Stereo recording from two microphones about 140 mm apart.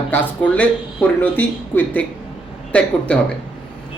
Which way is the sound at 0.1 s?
10° left (ahead or behind).